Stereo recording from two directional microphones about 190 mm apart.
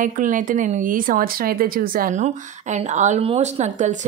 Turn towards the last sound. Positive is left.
turn(degrees=-40)  # may be behind; listen again after turning